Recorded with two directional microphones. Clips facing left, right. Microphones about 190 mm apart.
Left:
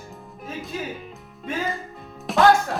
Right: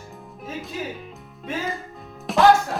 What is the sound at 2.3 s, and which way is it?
Music, centre (ahead or behind).